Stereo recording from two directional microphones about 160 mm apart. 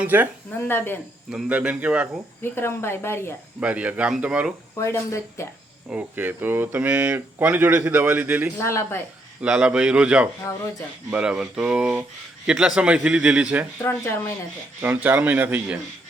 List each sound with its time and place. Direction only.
0.0 s speech: 10° right (ahead or behind)
0.7 s speech: 15° left (ahead or behind)
1.3 s speech: 5° right (ahead or behind)
2.4 s speech: 15° left (ahead or behind)
3.6 s speech: 10° right (ahead or behind)
4.8 s speech: 15° left (ahead or behind)
5.9 s speech: 10° right (ahead or behind)
8.5 s speech: 15° left (ahead or behind)
9.4 s a man's voice: 5° right (ahead or behind)
13.8 s speech: 15° left (ahead or behind)
14.8 s speech: 10° right (ahead or behind)